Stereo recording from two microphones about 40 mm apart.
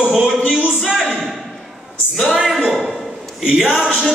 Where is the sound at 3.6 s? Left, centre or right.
Centre.